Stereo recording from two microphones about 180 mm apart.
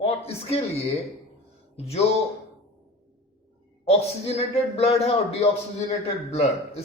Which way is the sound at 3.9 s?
35° left (ahead or behind).